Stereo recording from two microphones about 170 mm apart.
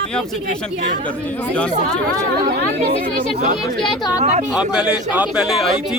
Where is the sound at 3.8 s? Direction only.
5° left (ahead or behind).